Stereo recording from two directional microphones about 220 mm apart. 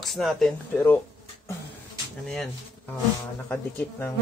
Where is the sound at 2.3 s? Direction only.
5° left (ahead or behind).